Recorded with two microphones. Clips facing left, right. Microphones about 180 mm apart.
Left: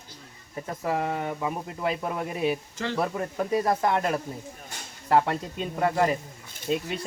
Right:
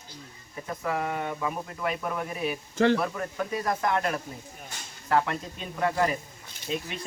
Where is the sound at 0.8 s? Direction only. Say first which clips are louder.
Left 2 dB; 30° left (ahead or behind).